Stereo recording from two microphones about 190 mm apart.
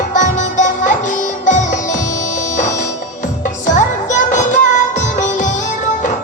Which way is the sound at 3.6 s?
40° left (ahead or behind).